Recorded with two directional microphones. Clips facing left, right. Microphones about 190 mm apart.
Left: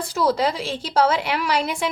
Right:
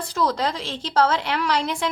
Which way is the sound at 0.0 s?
10° left (ahead or behind).